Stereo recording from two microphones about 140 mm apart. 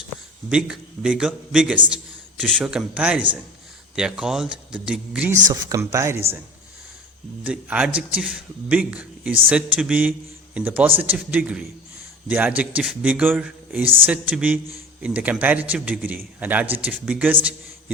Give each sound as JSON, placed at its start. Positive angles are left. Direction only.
{"t": 0.5, "sound": "a man's voice", "side_deg": -5}
{"t": 5.5, "sound": "speech", "side_deg": -25}
{"t": 7.4, "sound": "a man's voice", "side_deg": -10}